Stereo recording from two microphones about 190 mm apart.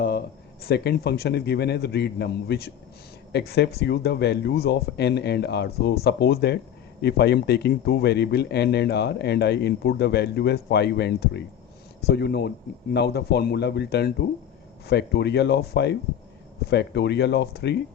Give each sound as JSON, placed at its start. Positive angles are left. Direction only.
{"t": 0.6, "sound": "speech", "side_deg": 55}